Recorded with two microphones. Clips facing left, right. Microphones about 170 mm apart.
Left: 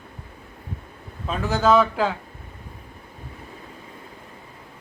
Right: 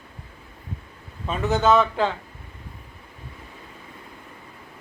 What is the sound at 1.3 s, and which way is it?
Speech, centre (ahead or behind).